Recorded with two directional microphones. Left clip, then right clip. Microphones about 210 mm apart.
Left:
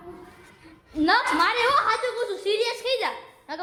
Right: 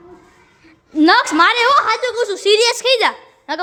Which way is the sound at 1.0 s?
55° right (ahead or behind).